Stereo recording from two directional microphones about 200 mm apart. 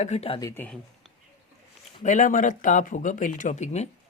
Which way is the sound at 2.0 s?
35° left (ahead or behind).